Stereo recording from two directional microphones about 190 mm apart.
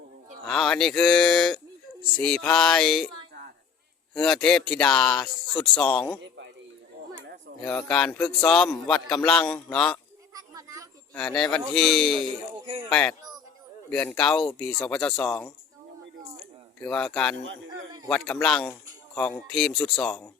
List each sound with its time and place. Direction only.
0.4 s speech: 5° left (ahead or behind)
4.1 s speech: 5° left (ahead or behind)
6.2 s a sound: 70° right (ahead or behind)
7.6 s speech: 5° left (ahead or behind)
10.3 s children playing: 20° right (ahead or behind)
11.1 s speech: 5° left (ahead or behind)
16.8 s speech: 5° left (ahead or behind)